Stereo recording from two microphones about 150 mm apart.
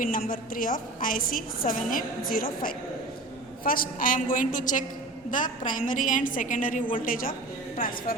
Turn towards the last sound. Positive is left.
turn(degrees=70)  # may be behind; listen again after turning